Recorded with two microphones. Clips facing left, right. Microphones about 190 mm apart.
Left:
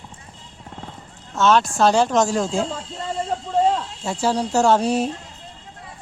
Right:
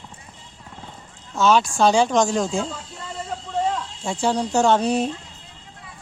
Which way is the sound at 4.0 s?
5° left (ahead or behind).